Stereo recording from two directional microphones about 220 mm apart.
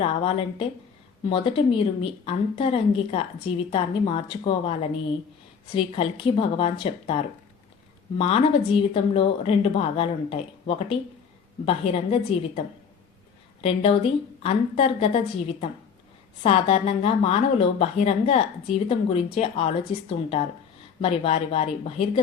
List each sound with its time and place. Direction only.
0.0 s a woman's voice: 25° left (ahead or behind)
8.2 s a woman's voice: 25° left (ahead or behind)
16.4 s a woman's voice: 25° left (ahead or behind)